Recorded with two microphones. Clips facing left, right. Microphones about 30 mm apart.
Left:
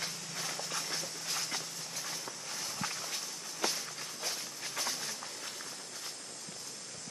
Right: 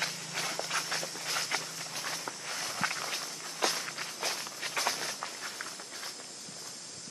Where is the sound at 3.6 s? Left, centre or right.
Right.